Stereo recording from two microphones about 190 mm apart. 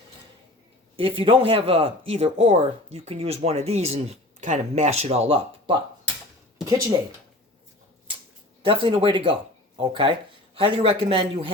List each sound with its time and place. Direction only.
0.9 s speech: 30° right (ahead or behind)
8.6 s a man's voice: 30° right (ahead or behind)